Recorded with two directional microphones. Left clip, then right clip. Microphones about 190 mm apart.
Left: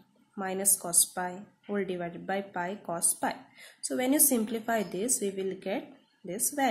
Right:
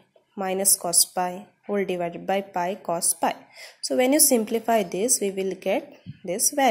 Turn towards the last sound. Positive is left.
turn(degrees=-30)  # may be behind; listen again after turning